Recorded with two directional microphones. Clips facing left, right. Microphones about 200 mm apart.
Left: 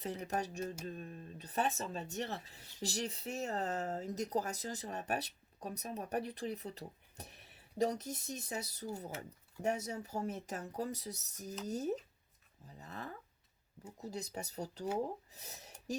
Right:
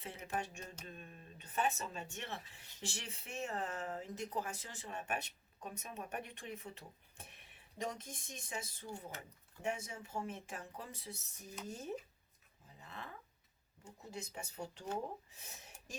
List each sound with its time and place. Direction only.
0.3 s speech: 40° left (ahead or behind)
12.8 s speech: 40° left (ahead or behind)
15.3 s a sound: 40° left (ahead or behind)